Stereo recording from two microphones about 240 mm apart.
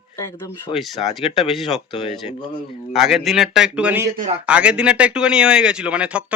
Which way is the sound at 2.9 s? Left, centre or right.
Centre.